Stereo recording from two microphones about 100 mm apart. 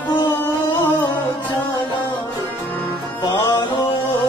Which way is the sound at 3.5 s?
45° left (ahead or behind).